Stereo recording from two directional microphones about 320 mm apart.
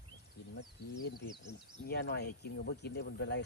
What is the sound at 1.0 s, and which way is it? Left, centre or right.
Speech, left.